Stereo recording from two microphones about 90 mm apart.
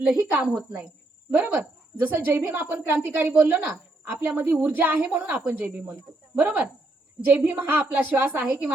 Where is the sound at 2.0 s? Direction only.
25° right (ahead or behind).